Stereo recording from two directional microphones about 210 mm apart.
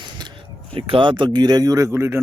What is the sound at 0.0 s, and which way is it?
Speech, 20° right (ahead or behind).